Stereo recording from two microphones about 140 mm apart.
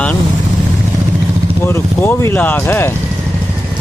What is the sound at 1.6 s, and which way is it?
Speech, 15° left (ahead or behind).